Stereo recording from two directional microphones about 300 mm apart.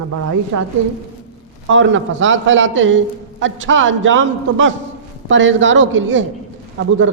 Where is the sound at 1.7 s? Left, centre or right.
Right.